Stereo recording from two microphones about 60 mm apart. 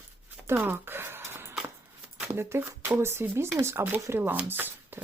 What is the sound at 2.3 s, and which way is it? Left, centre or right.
Speech, right.